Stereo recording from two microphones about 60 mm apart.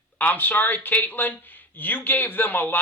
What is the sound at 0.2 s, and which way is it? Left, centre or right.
Speech, left.